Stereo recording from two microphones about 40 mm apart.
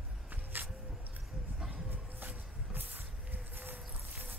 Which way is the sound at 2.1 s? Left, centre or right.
Right.